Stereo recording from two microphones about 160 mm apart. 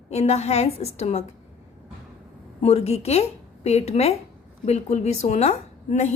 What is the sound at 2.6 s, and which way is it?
A woman's voice, 40° left (ahead or behind).